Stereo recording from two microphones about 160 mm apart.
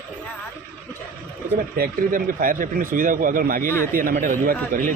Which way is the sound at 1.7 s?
65° right (ahead or behind).